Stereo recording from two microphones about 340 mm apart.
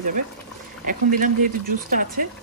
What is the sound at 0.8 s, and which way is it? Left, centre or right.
Speech, right.